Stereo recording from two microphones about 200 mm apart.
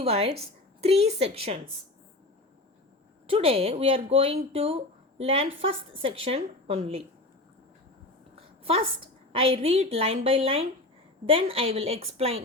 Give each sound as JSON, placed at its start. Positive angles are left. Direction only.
{"t": 0.0, "sound": "a woman's voice", "side_deg": -30}
{"t": 3.2, "sound": "speech", "side_deg": -30}
{"t": 8.4, "sound": "a sound", "side_deg": -30}
{"t": 9.3, "sound": "speech", "side_deg": -30}